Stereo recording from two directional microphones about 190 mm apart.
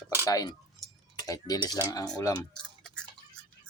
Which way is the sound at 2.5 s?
5° left (ahead or behind).